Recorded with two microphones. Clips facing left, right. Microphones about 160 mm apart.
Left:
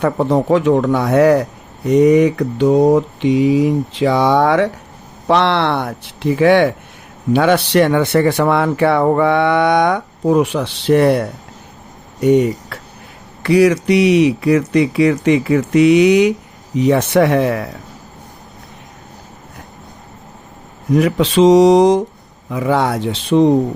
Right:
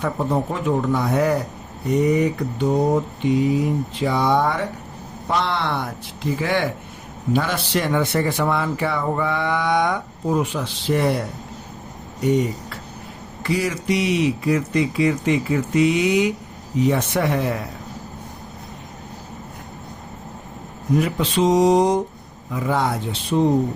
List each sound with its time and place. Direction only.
0.0 s speech: 75° left (ahead or behind)
1.9 s mantra: 90° left
5.3 s speech: 75° left (ahead or behind)
20.9 s mantra: 90° left
22.5 s speech: 80° left